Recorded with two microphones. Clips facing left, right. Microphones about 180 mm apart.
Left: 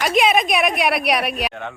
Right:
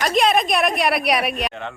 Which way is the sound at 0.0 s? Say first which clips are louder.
Left 1 dB; centre (ahead or behind).